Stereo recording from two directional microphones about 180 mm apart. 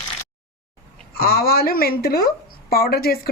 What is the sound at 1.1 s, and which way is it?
A woman's voice, 55° left (ahead or behind).